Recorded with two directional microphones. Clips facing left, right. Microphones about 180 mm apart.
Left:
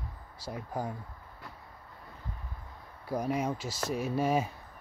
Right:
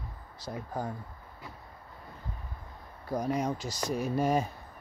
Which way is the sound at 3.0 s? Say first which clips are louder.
Right 1 dB; 5° left (ahead or behind).